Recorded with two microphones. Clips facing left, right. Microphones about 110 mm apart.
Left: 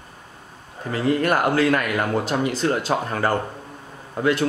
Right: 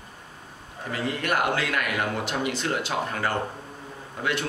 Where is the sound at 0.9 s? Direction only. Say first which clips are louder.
Left 7 dB; 35° left (ahead or behind).